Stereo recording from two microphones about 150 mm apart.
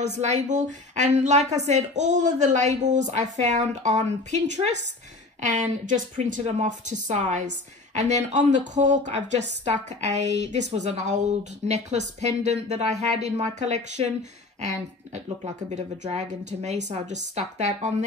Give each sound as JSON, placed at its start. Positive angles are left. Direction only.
{"t": 0.0, "sound": "a woman's voice", "side_deg": -50}
{"t": 15.1, "sound": "a woman's voice", "side_deg": -50}